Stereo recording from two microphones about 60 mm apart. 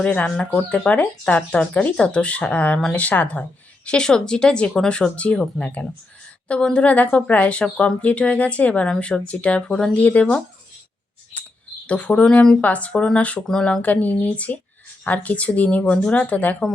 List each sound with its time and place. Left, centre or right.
0.0 s speech: left
3.8 s speech: centre
11.9 s speech: left
13.8 s speech: left